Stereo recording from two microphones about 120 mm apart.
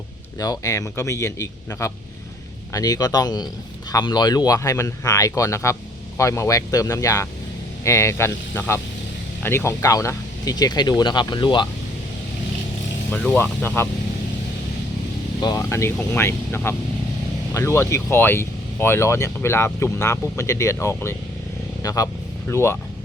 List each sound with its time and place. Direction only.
0.3 s speech: 30° left (ahead or behind)
13.1 s speech: 15° left (ahead or behind)
15.4 s speech: 30° left (ahead or behind)